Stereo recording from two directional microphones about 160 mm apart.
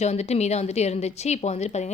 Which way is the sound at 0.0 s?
45° left (ahead or behind).